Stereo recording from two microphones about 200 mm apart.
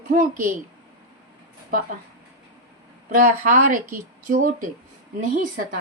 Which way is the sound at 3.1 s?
45° right (ahead or behind).